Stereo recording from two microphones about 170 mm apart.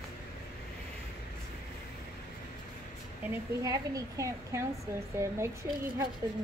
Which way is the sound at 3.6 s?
20° right (ahead or behind).